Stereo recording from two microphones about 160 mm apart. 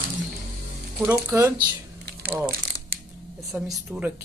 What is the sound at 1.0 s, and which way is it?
Speech, 15° right (ahead or behind).